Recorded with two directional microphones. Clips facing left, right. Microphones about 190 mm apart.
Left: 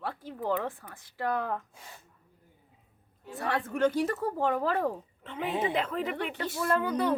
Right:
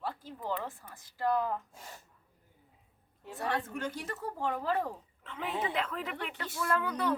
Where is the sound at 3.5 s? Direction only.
85° left.